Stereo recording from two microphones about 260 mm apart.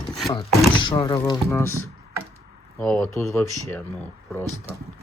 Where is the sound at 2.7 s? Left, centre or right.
Centre.